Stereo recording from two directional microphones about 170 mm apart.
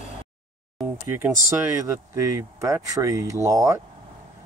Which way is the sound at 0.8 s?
15° right (ahead or behind).